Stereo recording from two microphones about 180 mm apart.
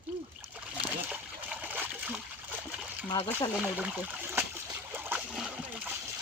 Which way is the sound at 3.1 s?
25° left (ahead or behind).